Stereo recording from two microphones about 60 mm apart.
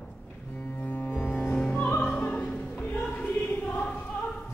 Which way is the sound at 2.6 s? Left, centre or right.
Left.